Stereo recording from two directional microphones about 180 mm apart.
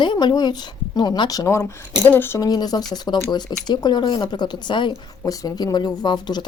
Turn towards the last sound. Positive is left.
turn(degrees=25)  # may be behind; listen again after turning